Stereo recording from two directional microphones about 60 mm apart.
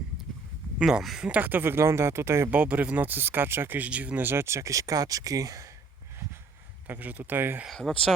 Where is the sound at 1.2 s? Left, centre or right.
Right.